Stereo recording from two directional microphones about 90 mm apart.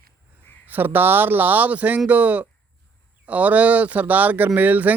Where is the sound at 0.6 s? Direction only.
20° right (ahead or behind).